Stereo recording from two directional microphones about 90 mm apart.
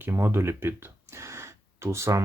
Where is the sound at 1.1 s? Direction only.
30° right (ahead or behind).